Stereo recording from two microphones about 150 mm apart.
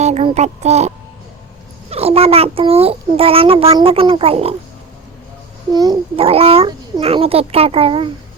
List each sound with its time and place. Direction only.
0.0 s music: 40° right (ahead or behind)
1.9 s a child's voice: 40° right (ahead or behind)
5.7 s a child's voice: 25° right (ahead or behind)
6.1 s a child's voice: 40° right (ahead or behind)